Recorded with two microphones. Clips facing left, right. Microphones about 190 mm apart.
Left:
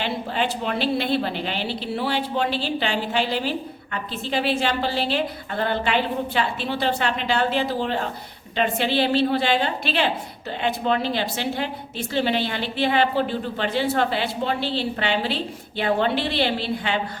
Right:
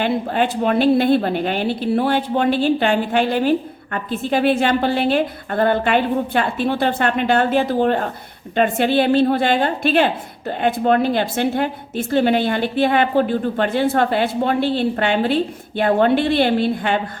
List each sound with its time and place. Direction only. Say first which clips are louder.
0.0 s a woman's voice: right 6 dB; 50° right (ahead or behind)